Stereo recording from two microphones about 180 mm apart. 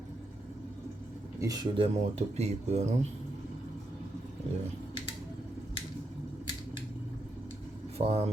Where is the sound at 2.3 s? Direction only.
40° right (ahead or behind).